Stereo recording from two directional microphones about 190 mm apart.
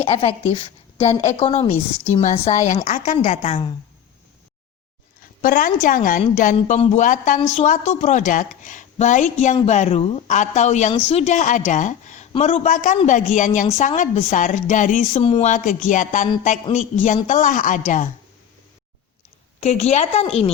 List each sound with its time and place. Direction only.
0.0 s a woman's voice: 30° left (ahead or behind)
5.4 s speech: 45° left (ahead or behind)
12.3 s speech: 30° left (ahead or behind)
19.5 s speech: 35° left (ahead or behind)